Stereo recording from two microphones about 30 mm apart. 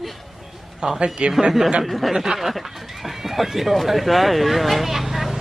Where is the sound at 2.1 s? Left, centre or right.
Centre.